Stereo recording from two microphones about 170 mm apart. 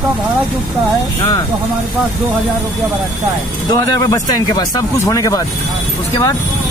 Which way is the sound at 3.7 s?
20° left (ahead or behind).